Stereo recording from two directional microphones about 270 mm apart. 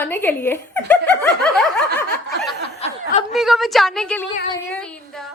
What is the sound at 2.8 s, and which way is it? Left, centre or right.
Snicker, left.